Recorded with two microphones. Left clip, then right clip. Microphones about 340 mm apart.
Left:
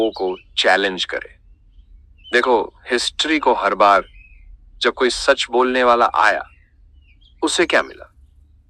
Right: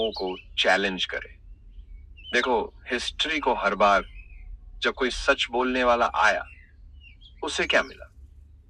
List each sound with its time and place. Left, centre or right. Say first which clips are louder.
0.0 s speech: left 8 dB; left
2.3 s speech: left 8 dB; left